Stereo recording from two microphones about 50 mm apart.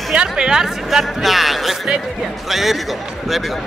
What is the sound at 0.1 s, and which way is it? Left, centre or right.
Speech, centre.